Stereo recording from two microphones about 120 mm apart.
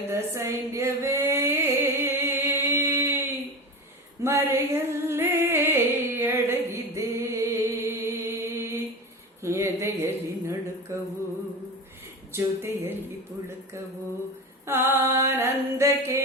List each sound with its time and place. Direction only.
0.0 s female singing: 20° right (ahead or behind)
4.2 s music: 20° right (ahead or behind)
9.4 s a sound: 25° right (ahead or behind)
12.3 s speech: 20° right (ahead or behind)
14.7 s mantra: 20° right (ahead or behind)